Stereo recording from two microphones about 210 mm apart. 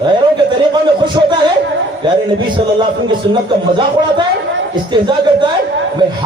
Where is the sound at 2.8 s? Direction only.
20° right (ahead or behind).